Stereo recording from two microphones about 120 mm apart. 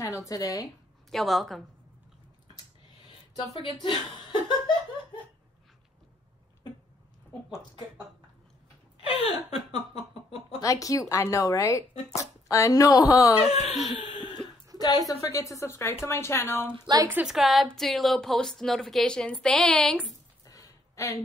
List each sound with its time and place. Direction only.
0.0 s a woman's voice: 25° left (ahead or behind)
1.1 s a woman's voice: centre (ahead or behind)
3.6 s speech: 40° left (ahead or behind)
9.0 s speech: 55° left (ahead or behind)
10.6 s a woman's voice: 30° left (ahead or behind)
13.4 s speech: 60° left (ahead or behind)
14.4 s a sound: 10° left (ahead or behind)
14.8 s a woman's voice: 30° left (ahead or behind)
16.7 s a woman's voice: 35° right (ahead or behind)
17.1 s a woman's voice: 10° right (ahead or behind)
20.4 s a sound: 30° left (ahead or behind)